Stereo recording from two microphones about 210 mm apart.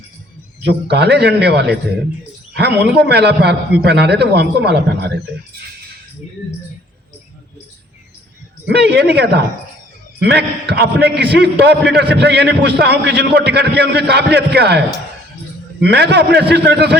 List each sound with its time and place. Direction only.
0.6 s a man's voice: 50° right (ahead or behind)
8.6 s a man's voice: 55° right (ahead or behind)
15.8 s a man's voice: 50° right (ahead or behind)